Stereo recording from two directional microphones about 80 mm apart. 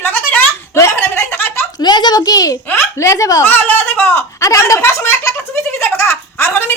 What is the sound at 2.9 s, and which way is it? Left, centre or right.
Speech, left.